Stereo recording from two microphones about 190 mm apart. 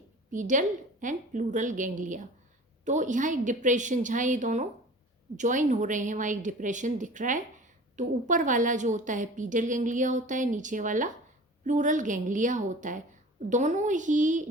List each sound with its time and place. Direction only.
0.3 s a woman's voice: 40° right (ahead or behind)